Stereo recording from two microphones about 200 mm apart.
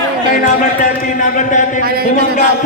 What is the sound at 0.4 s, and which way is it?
Speech, 45° left (ahead or behind).